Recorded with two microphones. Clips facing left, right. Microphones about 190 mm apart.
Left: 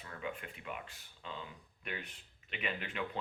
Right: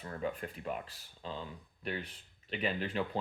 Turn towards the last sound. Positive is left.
turn(degrees=-35)  # may be behind; listen again after turning